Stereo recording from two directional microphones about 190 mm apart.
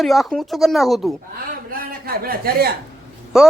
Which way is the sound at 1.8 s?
50° right (ahead or behind).